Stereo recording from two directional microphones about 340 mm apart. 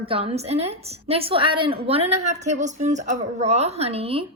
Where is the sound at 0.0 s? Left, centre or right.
Centre.